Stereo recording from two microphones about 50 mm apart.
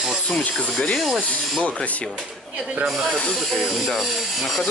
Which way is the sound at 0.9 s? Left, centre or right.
Centre.